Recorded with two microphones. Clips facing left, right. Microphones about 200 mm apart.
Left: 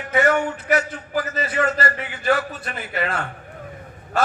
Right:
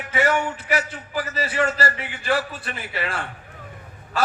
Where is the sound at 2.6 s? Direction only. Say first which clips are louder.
Left 3 dB; 45° left (ahead or behind).